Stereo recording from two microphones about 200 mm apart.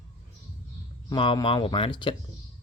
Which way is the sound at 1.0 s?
25° left (ahead or behind).